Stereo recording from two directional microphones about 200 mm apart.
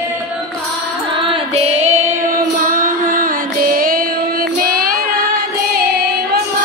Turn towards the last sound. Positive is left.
turn(degrees=-45)  # may be behind; listen again after turning